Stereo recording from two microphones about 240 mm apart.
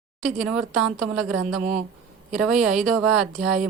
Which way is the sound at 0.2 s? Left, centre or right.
Centre.